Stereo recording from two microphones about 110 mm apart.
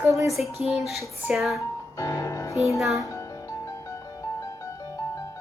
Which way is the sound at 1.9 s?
30° left (ahead or behind).